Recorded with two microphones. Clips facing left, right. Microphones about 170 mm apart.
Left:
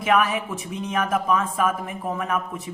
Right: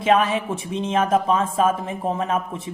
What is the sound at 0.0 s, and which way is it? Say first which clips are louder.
Speech: right 2 dB; 25° right (ahead or behind).